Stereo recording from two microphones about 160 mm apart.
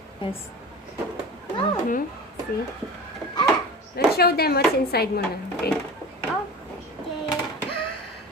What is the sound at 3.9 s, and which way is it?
Speech, 80° left.